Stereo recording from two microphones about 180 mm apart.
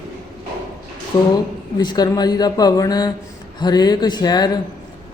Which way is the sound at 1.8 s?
25° left (ahead or behind).